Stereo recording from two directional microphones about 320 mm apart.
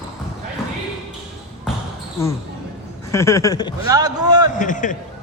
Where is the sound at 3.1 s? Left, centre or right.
Centre.